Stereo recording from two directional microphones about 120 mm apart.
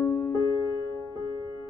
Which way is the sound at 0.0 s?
20° left (ahead or behind).